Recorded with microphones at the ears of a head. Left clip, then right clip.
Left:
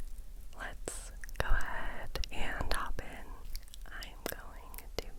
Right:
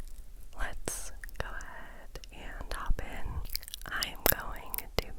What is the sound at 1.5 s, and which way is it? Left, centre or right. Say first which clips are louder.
Whispering: left 6 dB; left.